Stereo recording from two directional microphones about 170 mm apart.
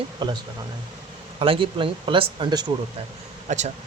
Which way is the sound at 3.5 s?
45° right (ahead or behind).